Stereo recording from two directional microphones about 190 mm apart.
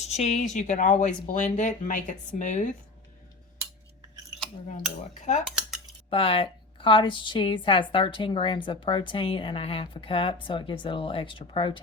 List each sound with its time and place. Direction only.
0.0 s speech: 35° left (ahead or behind)
5.3 s a woman's voice: 40° left (ahead or behind)